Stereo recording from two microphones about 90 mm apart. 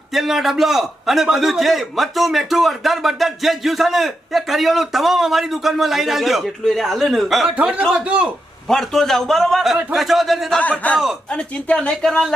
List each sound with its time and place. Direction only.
0.1 s a man's voice: 5° right (ahead or behind)
7.5 s a man's voice: 15° right (ahead or behind)
8.6 s a man's voice: 5° left (ahead or behind)
10.6 s a woman's voice: 15° left (ahead or behind)